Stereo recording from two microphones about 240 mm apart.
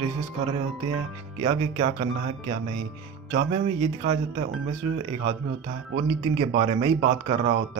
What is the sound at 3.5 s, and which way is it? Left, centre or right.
Speech, right.